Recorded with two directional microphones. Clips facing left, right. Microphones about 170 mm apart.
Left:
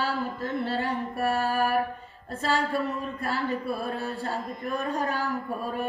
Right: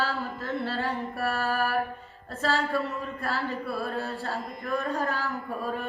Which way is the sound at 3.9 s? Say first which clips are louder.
Left 1 dB; 15° left (ahead or behind).